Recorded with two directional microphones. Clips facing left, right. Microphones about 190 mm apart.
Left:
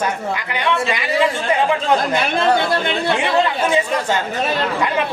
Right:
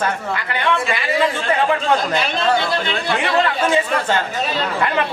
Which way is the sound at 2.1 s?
55° left (ahead or behind).